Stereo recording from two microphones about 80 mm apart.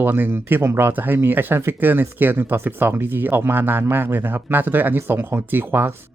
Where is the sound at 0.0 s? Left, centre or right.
Right.